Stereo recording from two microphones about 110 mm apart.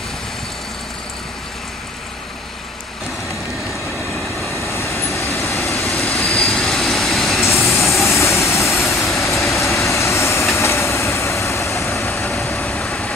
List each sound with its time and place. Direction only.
4.7 s vehicle: 25° left (ahead or behind)
5.5 s vehicle: centre (ahead or behind)
8.2 s vehicle: 25° left (ahead or behind)
8.9 s train: centre (ahead or behind)
9.8 s vehicle: 25° left (ahead or behind)
10.5 s train: 25° left (ahead or behind)
12.5 s vehicle: 5° left (ahead or behind)